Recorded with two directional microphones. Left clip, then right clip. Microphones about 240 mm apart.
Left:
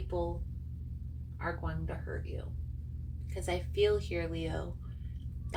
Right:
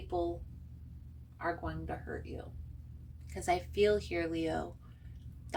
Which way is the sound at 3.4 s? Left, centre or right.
Right.